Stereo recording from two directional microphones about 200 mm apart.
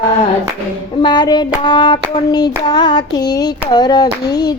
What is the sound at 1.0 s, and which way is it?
Hands, 20° left (ahead or behind).